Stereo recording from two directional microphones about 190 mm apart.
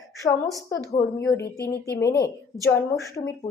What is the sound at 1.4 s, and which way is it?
Speech, 60° left (ahead or behind).